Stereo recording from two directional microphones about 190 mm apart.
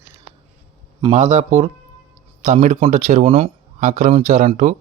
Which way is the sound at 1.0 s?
35° right (ahead or behind).